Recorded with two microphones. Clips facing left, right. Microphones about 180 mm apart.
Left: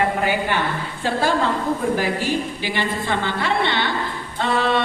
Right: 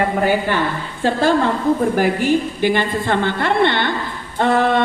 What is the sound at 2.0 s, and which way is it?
A man's voice, 50° right (ahead or behind).